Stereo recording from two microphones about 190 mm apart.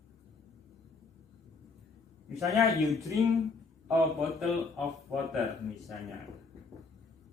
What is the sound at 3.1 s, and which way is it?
Speech, 15° right (ahead or behind).